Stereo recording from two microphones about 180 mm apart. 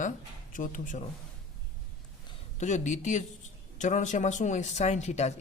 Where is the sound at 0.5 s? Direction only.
45° left (ahead or behind).